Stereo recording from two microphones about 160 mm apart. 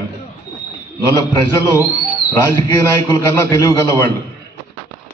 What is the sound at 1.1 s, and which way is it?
A man's voice, 15° left (ahead or behind).